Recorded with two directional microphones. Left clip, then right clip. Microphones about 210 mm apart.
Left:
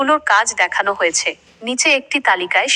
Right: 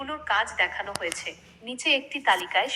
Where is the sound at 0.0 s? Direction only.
45° left (ahead or behind).